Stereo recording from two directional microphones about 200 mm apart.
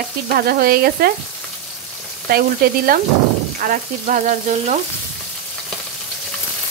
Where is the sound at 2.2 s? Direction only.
45° right (ahead or behind).